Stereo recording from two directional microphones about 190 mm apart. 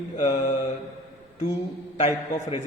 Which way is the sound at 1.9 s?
35° left (ahead or behind).